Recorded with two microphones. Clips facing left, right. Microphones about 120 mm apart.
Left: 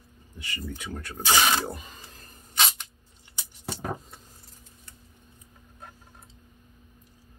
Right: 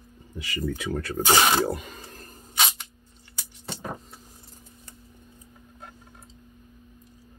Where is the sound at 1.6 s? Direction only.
80° right.